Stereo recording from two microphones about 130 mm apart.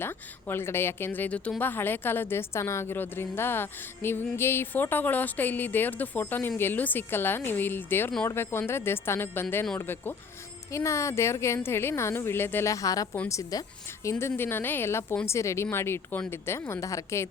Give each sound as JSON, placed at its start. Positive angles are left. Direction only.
{"t": 0.0, "sound": "a woman's voice", "side_deg": 15}